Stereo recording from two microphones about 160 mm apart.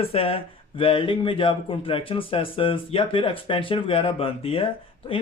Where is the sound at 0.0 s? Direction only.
35° left (ahead or behind).